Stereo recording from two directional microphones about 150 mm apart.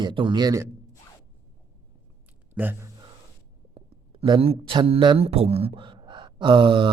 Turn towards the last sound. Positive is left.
turn(degrees=-35)  # may be behind; listen again after turning